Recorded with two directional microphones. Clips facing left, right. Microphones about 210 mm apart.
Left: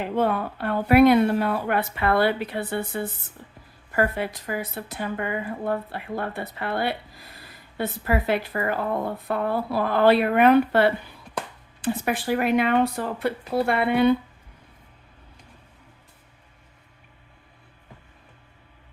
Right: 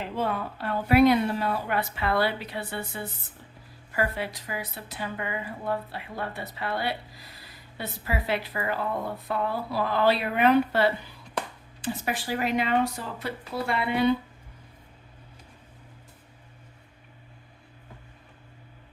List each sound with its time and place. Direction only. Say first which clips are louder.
0.0 s a woman's voice: left 6 dB; 55° left (ahead or behind)